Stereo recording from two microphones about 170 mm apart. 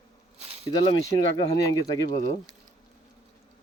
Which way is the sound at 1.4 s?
20° left (ahead or behind).